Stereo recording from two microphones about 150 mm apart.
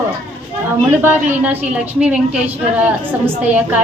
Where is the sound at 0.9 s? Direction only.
15° right (ahead or behind).